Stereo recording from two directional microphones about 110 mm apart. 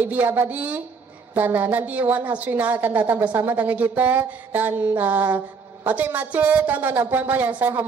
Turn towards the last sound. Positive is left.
turn(degrees=-20)  # may be behind; listen again after turning